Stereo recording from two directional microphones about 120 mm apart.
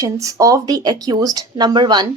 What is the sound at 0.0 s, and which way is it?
Speech, 30° right (ahead or behind).